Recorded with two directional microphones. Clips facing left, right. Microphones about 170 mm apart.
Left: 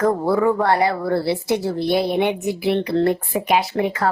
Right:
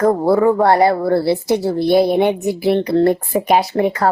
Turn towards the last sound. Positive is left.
turn(degrees=-40)  # may be behind; listen again after turning